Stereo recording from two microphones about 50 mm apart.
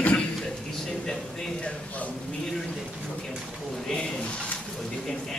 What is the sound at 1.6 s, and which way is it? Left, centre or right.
Speech, left.